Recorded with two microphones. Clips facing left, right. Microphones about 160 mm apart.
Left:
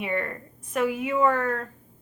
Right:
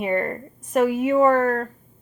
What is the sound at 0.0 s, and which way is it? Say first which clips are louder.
Speech: right 6 dB; 40° right (ahead or behind).